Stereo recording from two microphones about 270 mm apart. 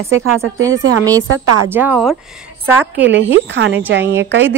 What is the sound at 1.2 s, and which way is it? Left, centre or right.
Speech, right.